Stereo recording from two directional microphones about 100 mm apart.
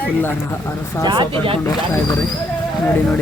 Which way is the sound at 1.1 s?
60° right (ahead or behind).